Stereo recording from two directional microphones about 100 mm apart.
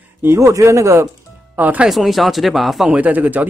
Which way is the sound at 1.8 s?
Centre (ahead or behind).